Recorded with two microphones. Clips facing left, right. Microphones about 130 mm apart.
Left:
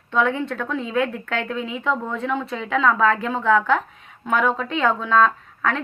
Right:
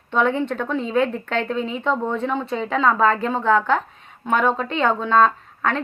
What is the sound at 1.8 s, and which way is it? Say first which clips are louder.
A woman's voice: right 1 dB; 30° right (ahead or behind).